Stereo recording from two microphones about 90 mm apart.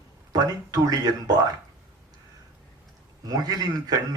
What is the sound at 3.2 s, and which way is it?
Speech, 45° right (ahead or behind).